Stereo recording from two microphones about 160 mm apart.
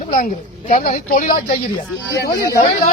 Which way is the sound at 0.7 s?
55° left (ahead or behind).